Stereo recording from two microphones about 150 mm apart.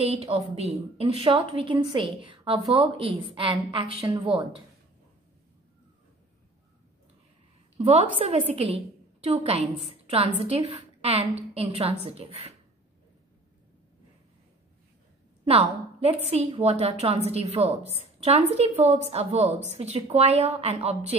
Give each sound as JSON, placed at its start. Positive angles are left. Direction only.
{"t": 0.0, "sound": "a woman's voice", "side_deg": -45}
{"t": 7.8, "sound": "a woman's voice", "side_deg": -45}
{"t": 15.4, "sound": "a woman's voice", "side_deg": -40}